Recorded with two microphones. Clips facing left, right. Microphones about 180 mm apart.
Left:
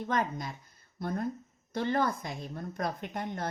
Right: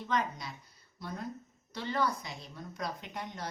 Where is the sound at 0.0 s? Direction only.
50° left (ahead or behind).